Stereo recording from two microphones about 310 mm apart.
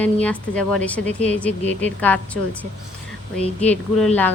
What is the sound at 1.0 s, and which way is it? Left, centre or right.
Speech, right.